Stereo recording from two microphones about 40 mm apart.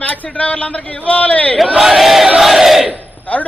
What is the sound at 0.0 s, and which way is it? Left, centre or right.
A man's voice, left.